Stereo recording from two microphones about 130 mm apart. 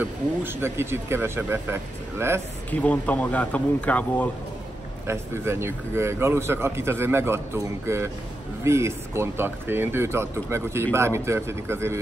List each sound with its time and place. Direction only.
0.0 s speech: 15° right (ahead or behind)
2.7 s speech: 10° left (ahead or behind)
5.0 s speech: 20° right (ahead or behind)